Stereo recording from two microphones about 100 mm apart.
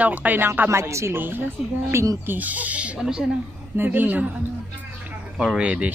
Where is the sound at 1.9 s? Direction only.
35° right (ahead or behind).